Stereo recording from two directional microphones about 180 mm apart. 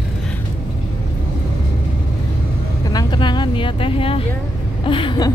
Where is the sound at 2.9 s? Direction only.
25° left (ahead or behind).